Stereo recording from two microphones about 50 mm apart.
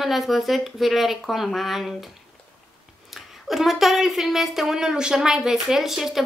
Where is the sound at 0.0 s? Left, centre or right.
Centre.